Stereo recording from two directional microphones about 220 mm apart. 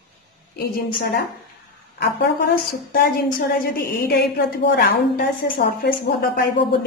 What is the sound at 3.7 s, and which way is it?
A woman's voice, 45° left (ahead or behind).